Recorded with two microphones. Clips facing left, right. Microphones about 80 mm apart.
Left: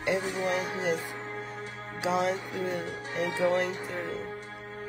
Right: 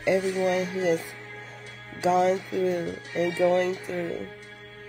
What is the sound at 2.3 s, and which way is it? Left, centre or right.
Music, left.